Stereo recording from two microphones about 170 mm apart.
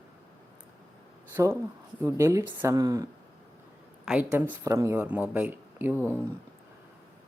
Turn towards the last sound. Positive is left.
turn(degrees=-10)  # may be behind; listen again after turning